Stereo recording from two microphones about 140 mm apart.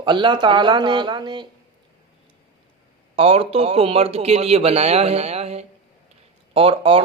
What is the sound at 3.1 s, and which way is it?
A man's voice, 40° right (ahead or behind).